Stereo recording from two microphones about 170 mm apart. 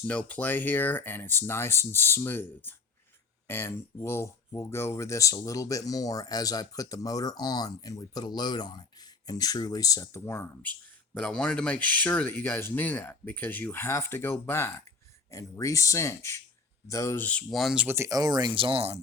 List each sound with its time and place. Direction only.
0.1 s speech: 10° left (ahead or behind); by 18.9 s 35° right (ahead or behind)